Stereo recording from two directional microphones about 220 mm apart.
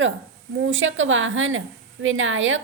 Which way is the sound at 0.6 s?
60° right (ahead or behind).